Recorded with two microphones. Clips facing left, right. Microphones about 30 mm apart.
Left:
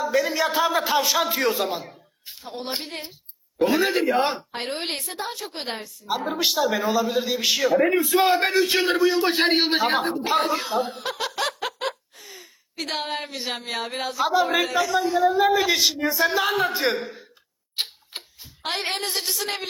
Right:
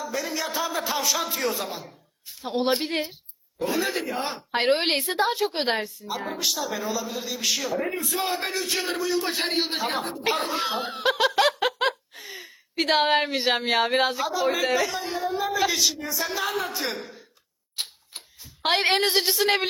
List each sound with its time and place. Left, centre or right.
0.2 s a man's voice: left
1.8 s a sound: left
2.4 s a woman's voice: right
3.8 s a man's voice: left
4.5 s a woman's voice: right
6.4 s a man's voice: left
10.3 s speech: centre
10.6 s a woman's voice: right
11.3 s a sound: centre
12.1 s a woman's voice: right
15.4 s a man's voice: left
17.7 s tick-tock: left
18.6 s a woman's voice: right